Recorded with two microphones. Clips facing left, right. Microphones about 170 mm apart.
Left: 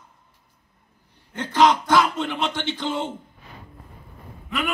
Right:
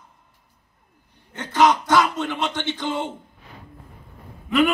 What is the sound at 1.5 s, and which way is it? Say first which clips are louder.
Speech: even; 15° right (ahead or behind).